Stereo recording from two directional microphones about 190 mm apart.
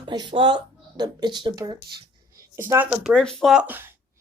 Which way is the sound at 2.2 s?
15° right (ahead or behind).